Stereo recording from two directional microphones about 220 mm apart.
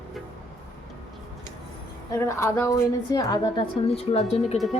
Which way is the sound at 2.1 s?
15° left (ahead or behind).